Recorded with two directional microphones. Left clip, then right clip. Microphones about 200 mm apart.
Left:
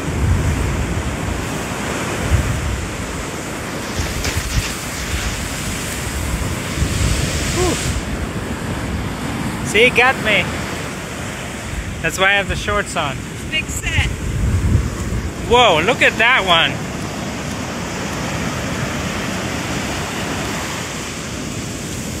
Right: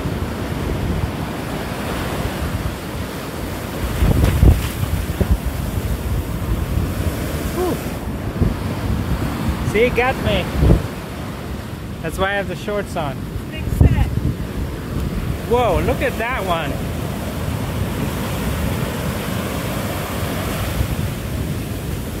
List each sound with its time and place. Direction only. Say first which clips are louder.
9.8 s speech: left 4 dB; 25° right (ahead or behind)
12.0 s speech: left 5 dB; 20° right (ahead or behind)
15.5 s speech: left 5 dB; 5° right (ahead or behind)